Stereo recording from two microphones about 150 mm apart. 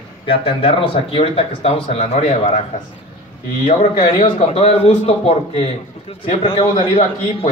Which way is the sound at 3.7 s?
60° left (ahead or behind).